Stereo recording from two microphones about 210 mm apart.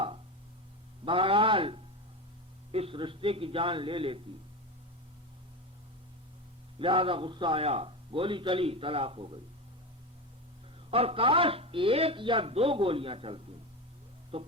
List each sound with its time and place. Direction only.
1.0 s a man's voice: 25° right (ahead or behind)
6.7 s a man's voice: 25° right (ahead or behind)
10.9 s a man's voice: 25° right (ahead or behind)